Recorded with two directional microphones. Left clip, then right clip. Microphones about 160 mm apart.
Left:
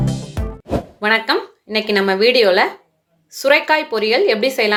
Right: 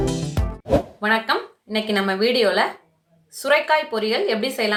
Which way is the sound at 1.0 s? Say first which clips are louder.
Left 4 dB; 40° left (ahead or behind).